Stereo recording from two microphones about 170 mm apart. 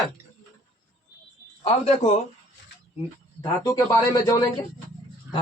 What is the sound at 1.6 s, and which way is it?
Speech, 40° left (ahead or behind).